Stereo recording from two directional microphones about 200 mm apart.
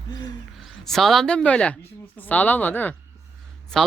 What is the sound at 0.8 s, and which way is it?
Speech, centre (ahead or behind).